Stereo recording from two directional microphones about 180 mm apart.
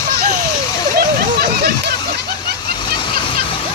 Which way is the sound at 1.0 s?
55° right (ahead or behind).